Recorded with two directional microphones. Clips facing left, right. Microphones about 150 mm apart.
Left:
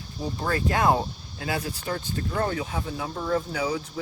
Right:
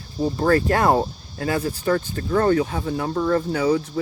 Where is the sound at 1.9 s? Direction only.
60° right (ahead or behind).